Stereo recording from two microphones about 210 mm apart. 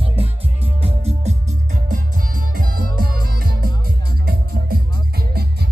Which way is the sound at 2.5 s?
45° right (ahead or behind).